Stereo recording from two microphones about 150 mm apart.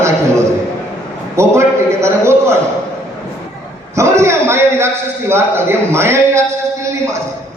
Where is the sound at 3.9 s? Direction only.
20° right (ahead or behind).